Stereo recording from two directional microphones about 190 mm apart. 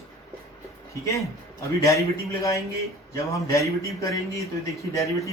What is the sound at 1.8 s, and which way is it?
Speech, 15° left (ahead or behind).